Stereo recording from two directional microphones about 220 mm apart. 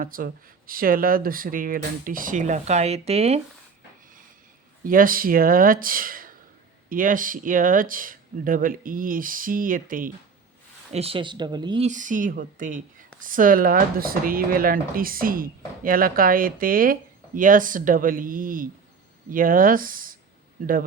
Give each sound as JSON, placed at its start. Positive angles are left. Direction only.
{"t": 0.0, "sound": "speech", "side_deg": -40}
{"t": 4.8, "sound": "speech", "side_deg": -40}
{"t": 10.9, "sound": "speech", "side_deg": -25}
{"t": 11.9, "sound": "speech", "side_deg": -35}